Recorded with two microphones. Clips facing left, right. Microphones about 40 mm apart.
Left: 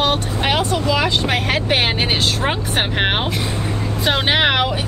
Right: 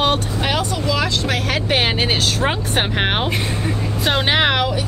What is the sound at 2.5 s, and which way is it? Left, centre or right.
Speech, centre.